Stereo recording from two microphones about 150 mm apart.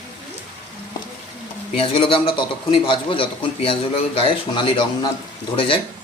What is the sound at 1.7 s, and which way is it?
A man's voice, 35° left (ahead or behind).